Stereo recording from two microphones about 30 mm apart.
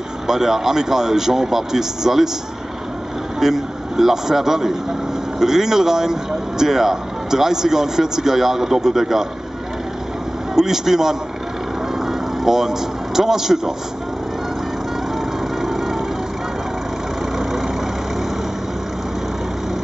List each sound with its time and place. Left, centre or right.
0.3 s speech: centre
3.3 s a man's voice: centre
10.5 s speech: centre
15.6 s vehicle: centre
17.4 s vehicle: centre